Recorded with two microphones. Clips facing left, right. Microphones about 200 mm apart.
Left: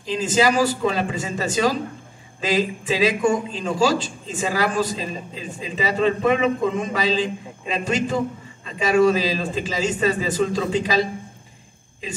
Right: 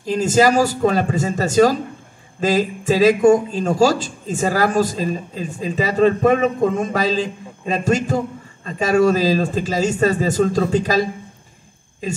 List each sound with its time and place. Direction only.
0.0 s a man's voice: 45° right (ahead or behind)